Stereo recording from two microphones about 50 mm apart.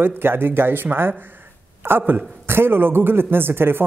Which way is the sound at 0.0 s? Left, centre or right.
Right.